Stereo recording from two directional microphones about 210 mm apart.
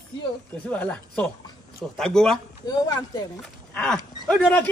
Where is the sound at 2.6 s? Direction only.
20° left (ahead or behind).